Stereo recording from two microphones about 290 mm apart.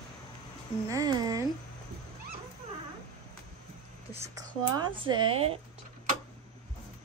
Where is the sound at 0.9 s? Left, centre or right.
Centre.